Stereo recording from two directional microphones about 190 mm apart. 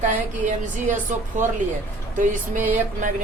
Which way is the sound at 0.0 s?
40° right (ahead or behind).